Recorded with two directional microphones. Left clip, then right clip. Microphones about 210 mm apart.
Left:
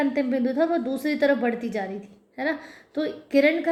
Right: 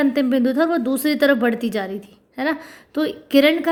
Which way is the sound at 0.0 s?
45° right (ahead or behind).